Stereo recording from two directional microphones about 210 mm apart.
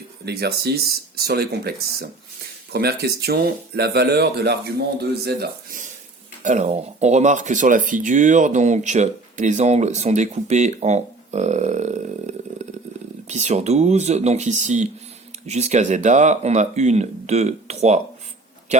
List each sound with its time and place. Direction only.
0.3 s speech: 50° right (ahead or behind)
6.4 s speech: 35° right (ahead or behind)